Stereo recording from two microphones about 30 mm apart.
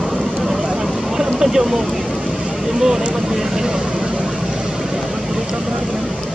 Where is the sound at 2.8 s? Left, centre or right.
Centre.